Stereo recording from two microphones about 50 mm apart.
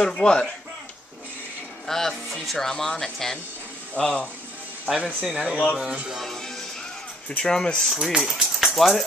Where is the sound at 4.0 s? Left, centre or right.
Left.